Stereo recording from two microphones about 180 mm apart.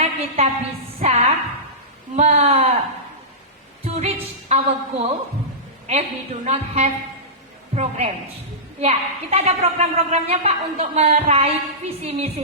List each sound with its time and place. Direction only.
0.0 s a sound: 35° right (ahead or behind)
0.9 s a woman's voice: 35° right (ahead or behind)
3.8 s a woman's voice: 40° right (ahead or behind)